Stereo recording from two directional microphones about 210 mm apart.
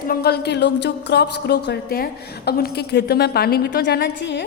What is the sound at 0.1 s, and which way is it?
Speech, 50° left (ahead or behind).